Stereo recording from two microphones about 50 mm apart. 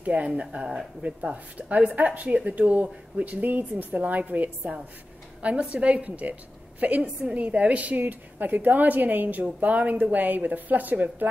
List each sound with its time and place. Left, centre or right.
0.0 s a woman's voice: right